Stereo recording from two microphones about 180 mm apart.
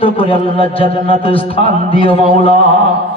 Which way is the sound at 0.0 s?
30° left (ahead or behind).